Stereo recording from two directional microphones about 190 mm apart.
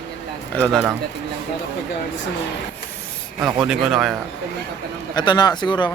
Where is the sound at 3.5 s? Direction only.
Centre (ahead or behind).